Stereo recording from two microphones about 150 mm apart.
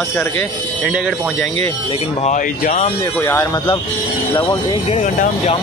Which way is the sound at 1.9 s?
45° left (ahead or behind).